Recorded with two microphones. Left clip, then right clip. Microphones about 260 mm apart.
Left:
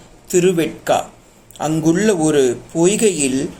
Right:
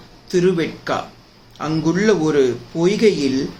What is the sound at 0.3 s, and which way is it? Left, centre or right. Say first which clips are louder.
Speech: left 2 dB; centre.